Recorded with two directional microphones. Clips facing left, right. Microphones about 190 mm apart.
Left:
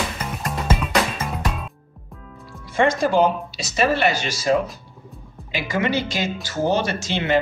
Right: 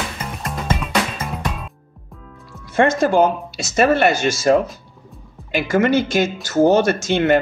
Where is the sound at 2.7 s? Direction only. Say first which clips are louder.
Right 3 dB; 50° right (ahead or behind).